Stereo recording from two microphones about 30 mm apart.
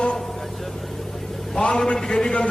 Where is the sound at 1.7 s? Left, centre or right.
Centre.